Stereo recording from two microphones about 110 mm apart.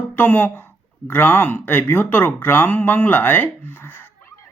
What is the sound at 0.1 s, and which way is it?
Speech, 15° left (ahead or behind).